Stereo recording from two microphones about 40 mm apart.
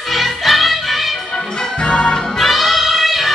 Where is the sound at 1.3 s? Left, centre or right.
Centre.